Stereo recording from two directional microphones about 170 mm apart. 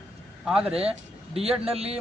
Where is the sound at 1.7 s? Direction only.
35° right (ahead or behind).